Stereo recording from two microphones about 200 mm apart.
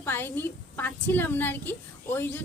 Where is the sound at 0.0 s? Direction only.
10° left (ahead or behind).